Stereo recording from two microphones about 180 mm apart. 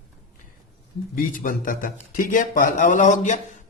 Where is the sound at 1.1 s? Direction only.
50° left (ahead or behind).